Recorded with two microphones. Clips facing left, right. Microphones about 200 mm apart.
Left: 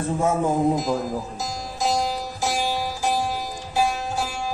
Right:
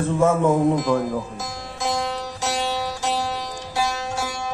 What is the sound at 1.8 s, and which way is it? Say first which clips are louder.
Music: left 1 dB; 60° right (ahead or behind).